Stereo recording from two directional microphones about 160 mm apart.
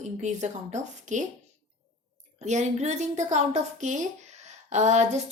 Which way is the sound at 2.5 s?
45° right (ahead or behind).